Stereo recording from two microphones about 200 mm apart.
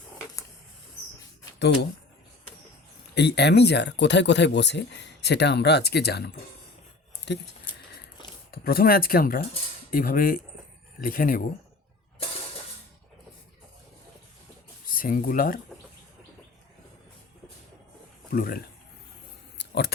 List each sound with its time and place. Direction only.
1.5 s speech: 55° left (ahead or behind)
3.2 s speech: 55° left (ahead or behind)
8.4 s speech: 50° left (ahead or behind)
14.8 s speech: 45° left (ahead or behind)
18.3 s speech: 45° left (ahead or behind)
19.5 s a sound: 55° left (ahead or behind)